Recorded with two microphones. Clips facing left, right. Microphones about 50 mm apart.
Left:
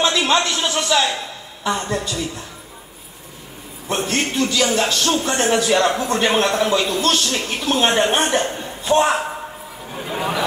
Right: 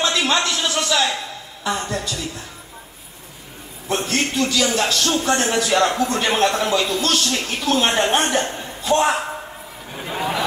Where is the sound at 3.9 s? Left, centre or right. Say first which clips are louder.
Even; left.